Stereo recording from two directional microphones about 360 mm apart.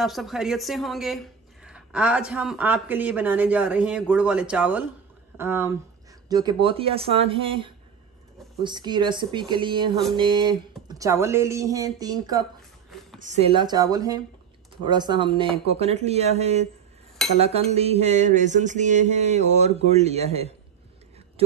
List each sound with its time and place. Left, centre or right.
0.0 s a woman's voice: centre
17.4 s a sound: centre
19.9 s speech: centre